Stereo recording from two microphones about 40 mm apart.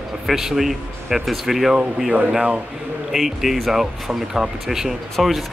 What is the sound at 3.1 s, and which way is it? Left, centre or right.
Speech, centre.